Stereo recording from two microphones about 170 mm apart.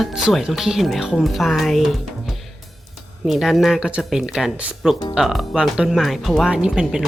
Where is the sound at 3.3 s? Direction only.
Centre (ahead or behind).